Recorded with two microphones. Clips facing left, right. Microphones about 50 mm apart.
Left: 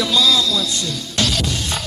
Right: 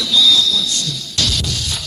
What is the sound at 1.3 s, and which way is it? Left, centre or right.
Music, centre.